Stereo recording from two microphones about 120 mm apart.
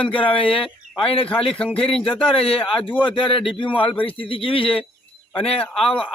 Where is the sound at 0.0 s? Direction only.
45° left (ahead or behind).